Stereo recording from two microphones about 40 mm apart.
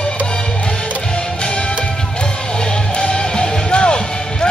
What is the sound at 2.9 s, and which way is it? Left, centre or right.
Music, centre.